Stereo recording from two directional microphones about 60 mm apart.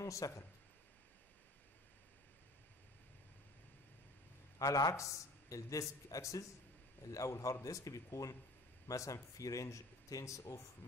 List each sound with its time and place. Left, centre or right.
0.0 s speech: left
4.6 s a man's voice: left